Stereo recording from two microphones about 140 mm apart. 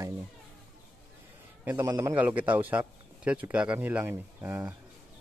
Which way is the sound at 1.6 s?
15° right (ahead or behind).